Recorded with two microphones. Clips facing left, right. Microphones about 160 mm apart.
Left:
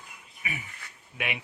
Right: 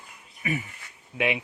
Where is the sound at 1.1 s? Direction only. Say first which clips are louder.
Right 8 dB; 30° right (ahead or behind).